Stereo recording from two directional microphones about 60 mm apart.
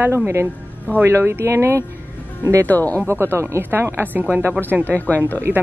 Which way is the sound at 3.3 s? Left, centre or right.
Right.